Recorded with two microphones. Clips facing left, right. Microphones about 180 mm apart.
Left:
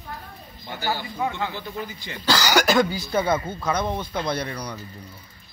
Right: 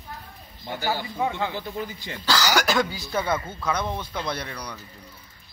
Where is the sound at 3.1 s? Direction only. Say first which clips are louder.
Left 2 dB; 20° left (ahead or behind).